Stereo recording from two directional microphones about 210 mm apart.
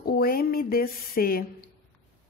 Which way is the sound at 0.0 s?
45° left (ahead or behind).